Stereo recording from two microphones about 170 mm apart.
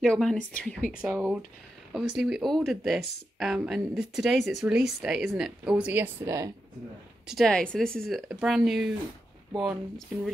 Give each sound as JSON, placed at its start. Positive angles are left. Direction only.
{"t": 0.0, "sound": "speech", "side_deg": 0}
{"t": 1.0, "sound": "speech", "side_deg": -10}
{"t": 6.2, "sound": "speech", "side_deg": -20}
{"t": 7.2, "sound": "speech", "side_deg": 0}